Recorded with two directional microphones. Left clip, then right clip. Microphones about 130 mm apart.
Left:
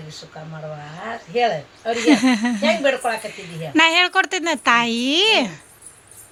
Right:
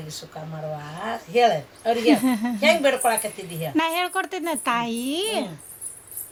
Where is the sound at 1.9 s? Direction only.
15° left (ahead or behind).